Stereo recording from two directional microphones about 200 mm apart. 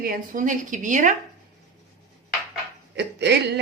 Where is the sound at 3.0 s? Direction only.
60° right (ahead or behind).